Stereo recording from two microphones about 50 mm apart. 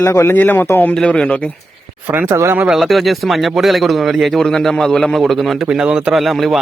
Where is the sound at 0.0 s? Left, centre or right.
Left.